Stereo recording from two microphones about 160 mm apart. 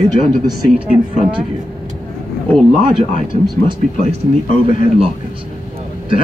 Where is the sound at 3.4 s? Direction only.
25° right (ahead or behind).